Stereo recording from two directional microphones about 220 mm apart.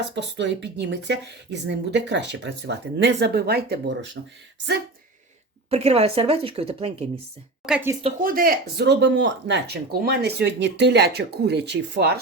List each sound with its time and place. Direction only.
0.0 s speech: 55° right (ahead or behind)
5.7 s speech: 30° right (ahead or behind)
7.6 s speech: 5° right (ahead or behind)
8.2 s speech: 40° right (ahead or behind)